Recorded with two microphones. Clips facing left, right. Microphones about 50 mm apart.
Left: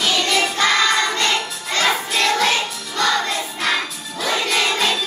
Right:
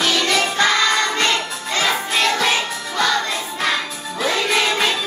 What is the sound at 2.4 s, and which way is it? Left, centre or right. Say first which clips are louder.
Music: even; centre.